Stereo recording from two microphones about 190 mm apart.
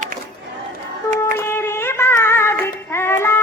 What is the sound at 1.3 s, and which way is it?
Child singing, 10° left (ahead or behind).